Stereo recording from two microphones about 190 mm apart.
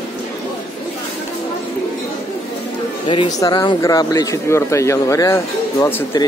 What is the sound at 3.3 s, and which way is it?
Speech, 20° left (ahead or behind).